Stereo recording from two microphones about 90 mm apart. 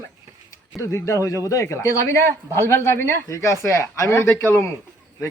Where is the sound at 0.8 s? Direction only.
30° left (ahead or behind).